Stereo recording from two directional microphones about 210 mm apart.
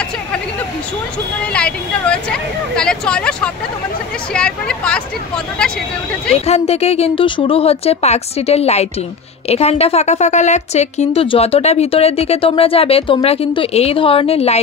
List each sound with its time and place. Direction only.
1.4 s speech: 5° left (ahead or behind)
6.3 s a woman's voice: 30° left (ahead or behind)